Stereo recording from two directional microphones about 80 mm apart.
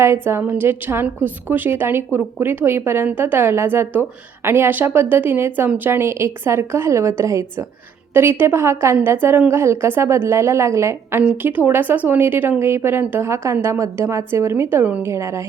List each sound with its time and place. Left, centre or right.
0.0 s a woman's voice: right
0.4 s speech: right
5.9 s a woman's voice: right
11.2 s speech: right
15.0 s a woman's voice: right